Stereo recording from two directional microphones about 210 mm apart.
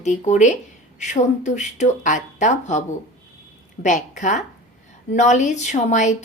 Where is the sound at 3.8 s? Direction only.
35° left (ahead or behind).